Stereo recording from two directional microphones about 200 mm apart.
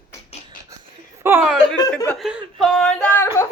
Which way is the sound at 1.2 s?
10° right (ahead or behind).